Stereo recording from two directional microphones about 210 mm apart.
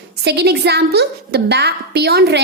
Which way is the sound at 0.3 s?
50° right (ahead or behind).